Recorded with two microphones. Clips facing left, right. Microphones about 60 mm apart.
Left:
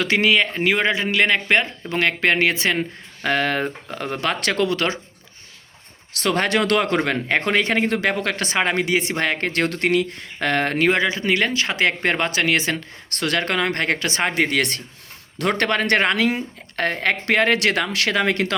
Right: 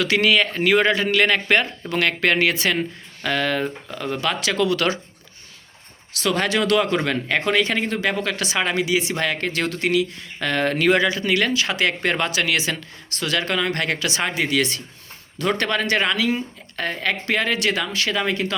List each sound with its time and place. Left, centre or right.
0.0 s speech: left
3.2 s speech: left
6.2 s a woman's voice: left
7.0 s speech: left
7.9 s a woman's voice: left
9.5 s speech: left
13.1 s a woman's voice: left